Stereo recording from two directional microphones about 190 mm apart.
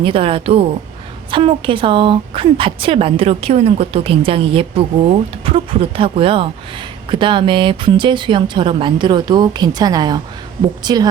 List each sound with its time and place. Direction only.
0.0 s a woman's voice: 30° right (ahead or behind)